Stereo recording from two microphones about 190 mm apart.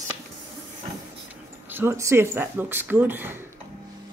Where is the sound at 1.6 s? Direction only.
10° right (ahead or behind).